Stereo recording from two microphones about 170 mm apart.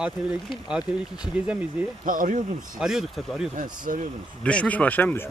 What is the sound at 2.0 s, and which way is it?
Speech, 55° right (ahead or behind).